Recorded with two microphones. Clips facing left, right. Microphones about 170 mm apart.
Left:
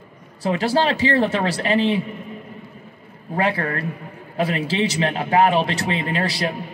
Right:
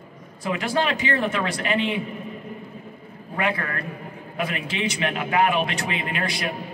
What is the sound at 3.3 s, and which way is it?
A man's voice, 35° left (ahead or behind).